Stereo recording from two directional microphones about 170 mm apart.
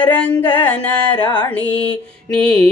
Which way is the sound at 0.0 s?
10° left (ahead or behind).